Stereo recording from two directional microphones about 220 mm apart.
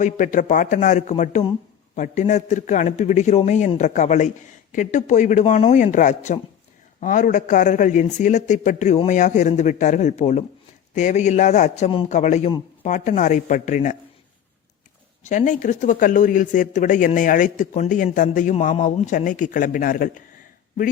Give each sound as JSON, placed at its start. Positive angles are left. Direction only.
{"t": 0.0, "sound": "speech", "side_deg": 35}
{"t": 15.2, "sound": "speech", "side_deg": 35}